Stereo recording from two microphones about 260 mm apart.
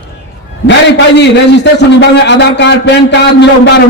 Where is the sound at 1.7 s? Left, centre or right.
Left.